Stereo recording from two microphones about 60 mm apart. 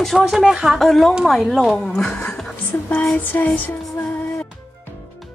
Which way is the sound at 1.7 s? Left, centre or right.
Centre.